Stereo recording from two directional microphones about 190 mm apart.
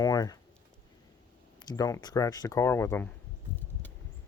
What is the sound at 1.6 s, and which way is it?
Speech, 20° left (ahead or behind).